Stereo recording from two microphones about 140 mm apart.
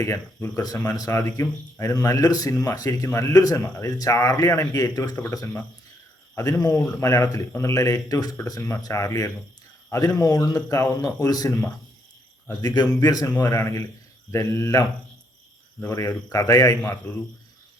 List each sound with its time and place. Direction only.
0.0 s speech: 20° left (ahead or behind)
15.9 s speech: 20° left (ahead or behind)